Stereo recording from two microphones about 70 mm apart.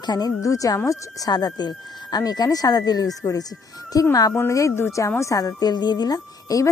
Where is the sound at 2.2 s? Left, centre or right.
Left.